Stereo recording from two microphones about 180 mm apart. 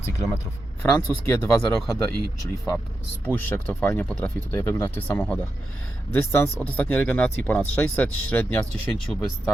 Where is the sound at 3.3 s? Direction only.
10° left (ahead or behind).